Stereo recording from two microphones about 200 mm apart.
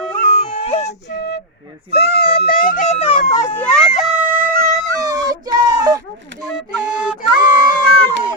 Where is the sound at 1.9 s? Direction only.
55° left (ahead or behind); by 3.2 s 30° left (ahead or behind).